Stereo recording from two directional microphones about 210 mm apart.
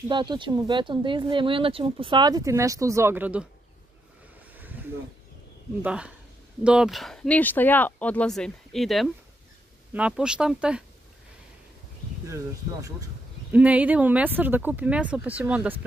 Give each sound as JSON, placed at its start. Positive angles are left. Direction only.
{"t": 0.1, "sound": "speech", "side_deg": -20}
{"t": 5.8, "sound": "speech", "side_deg": -5}
{"t": 13.5, "sound": "speech", "side_deg": -5}